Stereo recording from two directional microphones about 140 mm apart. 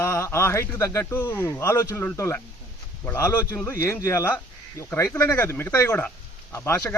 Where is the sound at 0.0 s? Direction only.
20° left (ahead or behind).